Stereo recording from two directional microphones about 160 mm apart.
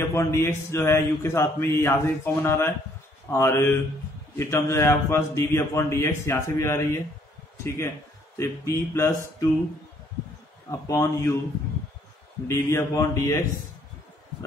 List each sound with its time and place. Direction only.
0.1 s speech: 15° left (ahead or behind)
10.7 s speech: 20° left (ahead or behind)
12.4 s a man's voice: 15° left (ahead or behind)